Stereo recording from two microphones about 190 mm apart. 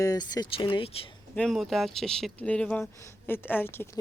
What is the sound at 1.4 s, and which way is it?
Speech, centre (ahead or behind).